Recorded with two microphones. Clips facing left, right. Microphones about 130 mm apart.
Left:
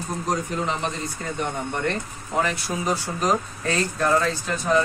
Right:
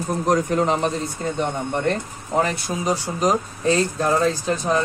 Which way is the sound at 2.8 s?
15° right (ahead or behind).